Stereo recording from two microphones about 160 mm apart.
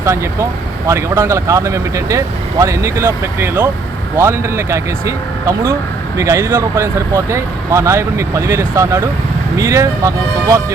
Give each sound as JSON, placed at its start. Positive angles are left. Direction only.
{"t": 0.0, "sound": "speech", "side_deg": -20}